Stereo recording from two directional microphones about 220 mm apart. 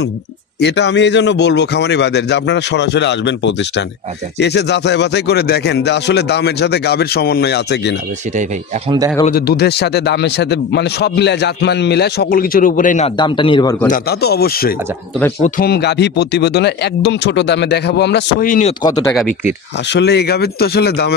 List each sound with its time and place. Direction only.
0.6 s a man's voice: 50° left (ahead or behind)
9.2 s a man's voice: 45° left (ahead or behind)
13.2 s a man's voice: 20° left (ahead or behind)
13.8 s a man's voice: 40° left (ahead or behind)
18.7 s speech: 20° left (ahead or behind)
19.9 s a man's voice: 50° left (ahead or behind)